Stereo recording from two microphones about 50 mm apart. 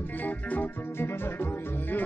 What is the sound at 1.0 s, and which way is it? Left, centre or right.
Music, left.